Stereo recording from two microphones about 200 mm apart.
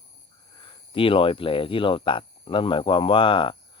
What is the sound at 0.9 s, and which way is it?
Speech, 25° left (ahead or behind).